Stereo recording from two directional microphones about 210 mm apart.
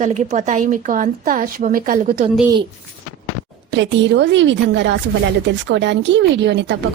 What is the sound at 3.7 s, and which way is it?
A woman's voice, 60° right (ahead or behind).